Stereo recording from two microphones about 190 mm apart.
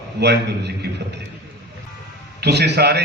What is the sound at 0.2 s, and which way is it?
Speech, 65° right (ahead or behind).